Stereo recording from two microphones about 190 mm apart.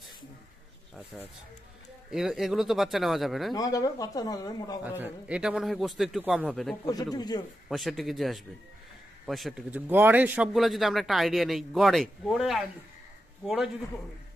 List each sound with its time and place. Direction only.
1.1 s a man's voice: centre (ahead or behind)
3.5 s speech: 20° left (ahead or behind)
4.8 s a man's voice: 10° right (ahead or behind)
6.9 s speech: 20° left (ahead or behind)
7.6 s a man's voice: centre (ahead or behind)